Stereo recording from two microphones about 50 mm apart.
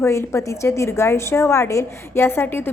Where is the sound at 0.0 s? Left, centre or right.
Left.